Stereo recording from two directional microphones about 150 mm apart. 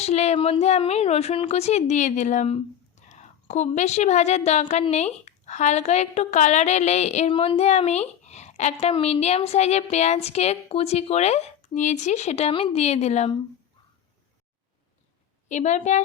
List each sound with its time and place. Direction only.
0.0 s a woman's voice: 45° left (ahead or behind)
15.4 s a woman's voice: 50° left (ahead or behind)